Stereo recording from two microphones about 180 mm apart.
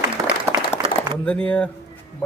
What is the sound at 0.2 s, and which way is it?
Applause, 20° right (ahead or behind).